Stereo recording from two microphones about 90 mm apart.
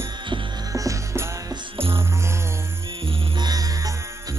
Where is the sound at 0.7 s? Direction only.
35° right (ahead or behind).